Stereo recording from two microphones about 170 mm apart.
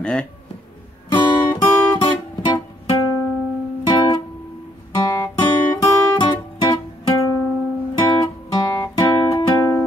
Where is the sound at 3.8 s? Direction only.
25° left (ahead or behind).